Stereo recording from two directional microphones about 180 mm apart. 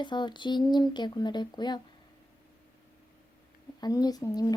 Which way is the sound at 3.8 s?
20° left (ahead or behind).